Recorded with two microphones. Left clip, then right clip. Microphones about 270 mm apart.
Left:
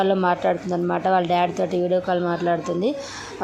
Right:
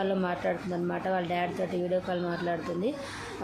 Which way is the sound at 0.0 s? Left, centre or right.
Centre.